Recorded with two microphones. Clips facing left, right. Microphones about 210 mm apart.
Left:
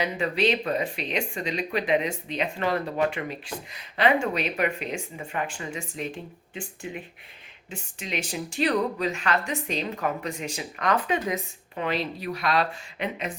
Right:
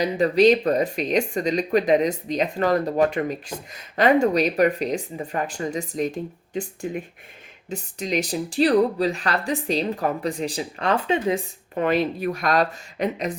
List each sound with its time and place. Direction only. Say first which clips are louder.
0.0 s speech: right 8 dB; 40° right (ahead or behind)
11.7 s speech: right 7 dB; 50° right (ahead or behind)